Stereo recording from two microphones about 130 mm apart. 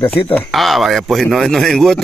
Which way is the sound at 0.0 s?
15° left (ahead or behind).